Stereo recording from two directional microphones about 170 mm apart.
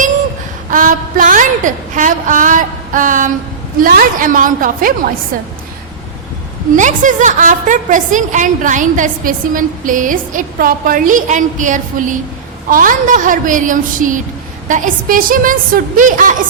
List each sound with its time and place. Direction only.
0.7 s a woman's voice: 55° right (ahead or behind)
6.7 s a woman's voice: 45° right (ahead or behind)